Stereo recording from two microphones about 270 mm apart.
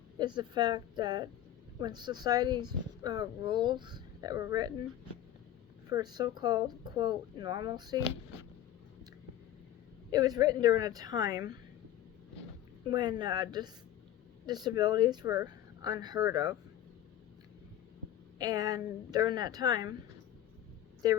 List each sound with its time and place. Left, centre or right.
0.2 s speech: centre
5.9 s speech: centre
10.1 s speech: centre
12.9 s speech: centre
18.3 s speech: centre
21.0 s speech: centre